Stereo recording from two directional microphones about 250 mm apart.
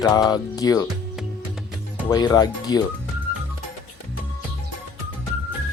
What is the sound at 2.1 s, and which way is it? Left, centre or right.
Speech, centre.